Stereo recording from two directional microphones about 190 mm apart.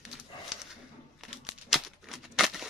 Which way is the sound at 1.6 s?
Centre (ahead or behind).